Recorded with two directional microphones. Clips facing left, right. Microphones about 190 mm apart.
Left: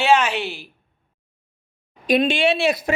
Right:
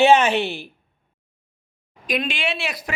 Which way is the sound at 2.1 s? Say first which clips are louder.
Left 7 dB; 30° left (ahead or behind).